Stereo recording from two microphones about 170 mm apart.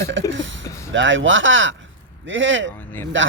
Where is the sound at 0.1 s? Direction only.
90° right.